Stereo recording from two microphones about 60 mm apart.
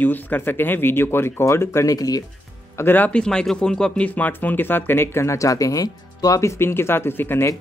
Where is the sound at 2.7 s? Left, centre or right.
Left.